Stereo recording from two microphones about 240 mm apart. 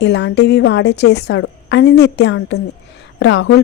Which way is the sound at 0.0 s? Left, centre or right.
Left.